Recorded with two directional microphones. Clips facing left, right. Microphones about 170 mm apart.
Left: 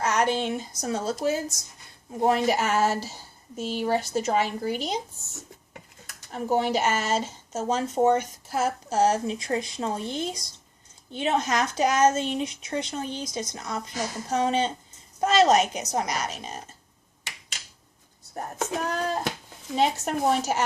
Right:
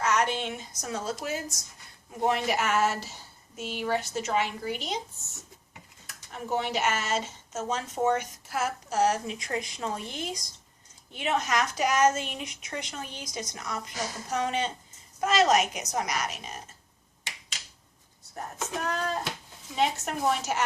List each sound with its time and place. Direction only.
0.0 s speech: 35° left (ahead or behind)
6.3 s speech: 35° left (ahead or behind)
18.3 s speech: 35° left (ahead or behind)